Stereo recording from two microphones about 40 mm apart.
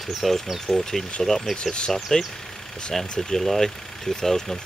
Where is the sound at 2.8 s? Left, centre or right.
Centre.